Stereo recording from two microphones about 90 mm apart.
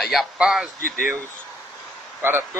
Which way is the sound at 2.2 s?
25° right (ahead or behind).